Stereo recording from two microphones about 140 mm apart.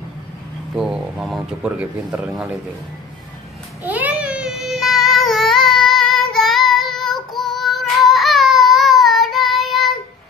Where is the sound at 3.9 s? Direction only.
10° right (ahead or behind).